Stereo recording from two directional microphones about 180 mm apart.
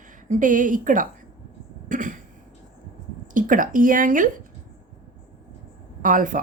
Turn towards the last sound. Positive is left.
turn(degrees=-45)  # may be behind; listen again after turning